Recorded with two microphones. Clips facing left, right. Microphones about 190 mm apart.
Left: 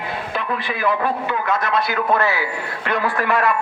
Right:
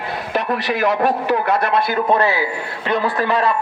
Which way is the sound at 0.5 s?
80° right.